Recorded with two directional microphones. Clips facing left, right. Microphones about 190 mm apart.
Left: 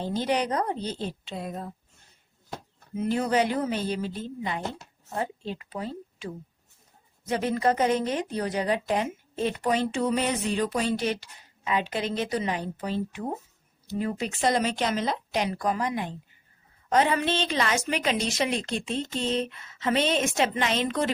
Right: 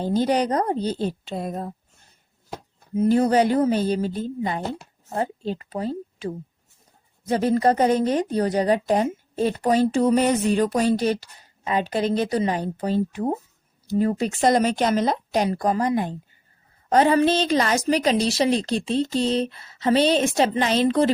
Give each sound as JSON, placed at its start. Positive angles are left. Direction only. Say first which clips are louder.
{"t": 0.0, "sound": "a woman's voice", "louder": "right 6 dB", "side_deg": -40}
{"t": 2.9, "sound": "a woman's voice", "louder": "right 7 dB", "side_deg": -35}